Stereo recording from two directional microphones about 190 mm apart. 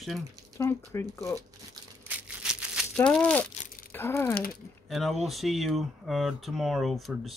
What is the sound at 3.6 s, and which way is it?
Crumpling, 45° left (ahead or behind).